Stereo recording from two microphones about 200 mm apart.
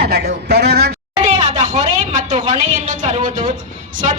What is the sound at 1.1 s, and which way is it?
A woman's voice, 35° right (ahead or behind).